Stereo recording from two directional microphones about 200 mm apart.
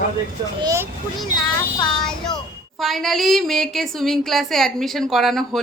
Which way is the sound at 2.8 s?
Centre (ahead or behind).